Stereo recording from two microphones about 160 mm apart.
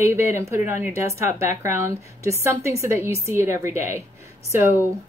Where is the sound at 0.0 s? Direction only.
15° right (ahead or behind).